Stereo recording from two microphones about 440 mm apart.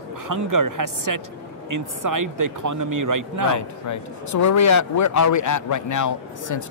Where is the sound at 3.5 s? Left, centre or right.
Left.